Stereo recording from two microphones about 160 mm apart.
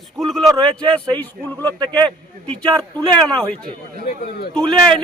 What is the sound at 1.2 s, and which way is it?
Speech, 10° left (ahead or behind).